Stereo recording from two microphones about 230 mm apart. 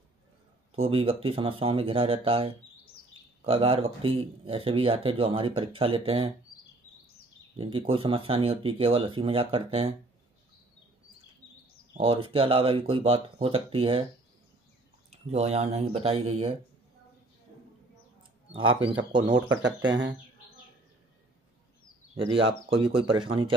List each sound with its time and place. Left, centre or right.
0.7 s speech: right
7.5 s speech: right
11.9 s speech: right
15.0 s speech: right
18.5 s speech: right
19.5 s speech: right
22.7 s speech: right